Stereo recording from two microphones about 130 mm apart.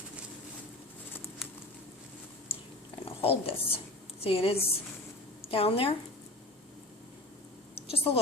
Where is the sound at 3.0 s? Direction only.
45° left (ahead or behind).